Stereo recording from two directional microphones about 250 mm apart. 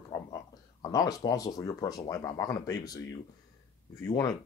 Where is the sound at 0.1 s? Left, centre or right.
Centre.